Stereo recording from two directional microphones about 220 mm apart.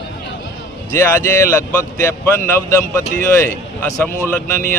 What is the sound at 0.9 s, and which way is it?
Speech, 10° left (ahead or behind).